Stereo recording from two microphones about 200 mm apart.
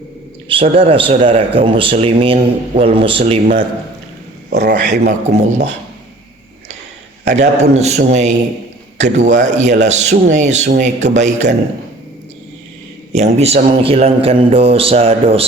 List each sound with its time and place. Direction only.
0.4 s speech: 25° right (ahead or behind)
4.4 s speech: 55° right (ahead or behind)
5.0 s a man's voice: 35° right (ahead or behind)
7.3 s a man's voice: 35° right (ahead or behind)
13.1 s speech: 35° right (ahead or behind)